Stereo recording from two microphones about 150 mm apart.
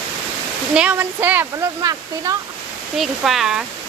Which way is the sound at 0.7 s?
10° right (ahead or behind).